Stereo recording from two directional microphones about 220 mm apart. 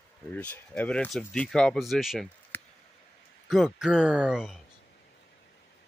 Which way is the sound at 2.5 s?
10° left (ahead or behind).